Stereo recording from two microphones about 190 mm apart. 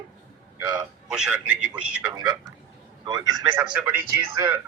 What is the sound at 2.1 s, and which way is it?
A man's voice, 20° right (ahead or behind).